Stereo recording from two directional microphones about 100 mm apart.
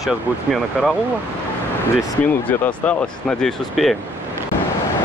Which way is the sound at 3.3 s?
Centre (ahead or behind).